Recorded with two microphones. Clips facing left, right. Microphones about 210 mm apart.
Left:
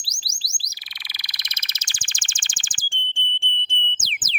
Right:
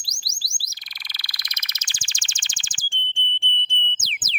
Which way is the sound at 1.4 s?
30° left (ahead or behind).